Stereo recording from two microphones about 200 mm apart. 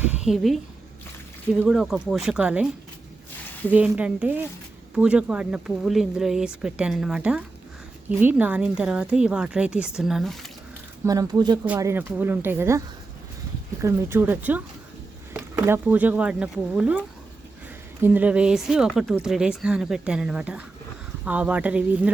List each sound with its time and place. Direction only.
0.0 s speech: 5° right (ahead or behind)
3.7 s speech: 5° right (ahead or behind)
11.0 s speech: 15° right (ahead or behind)
13.8 s speech: 10° right (ahead or behind)
18.0 s speech: 10° right (ahead or behind)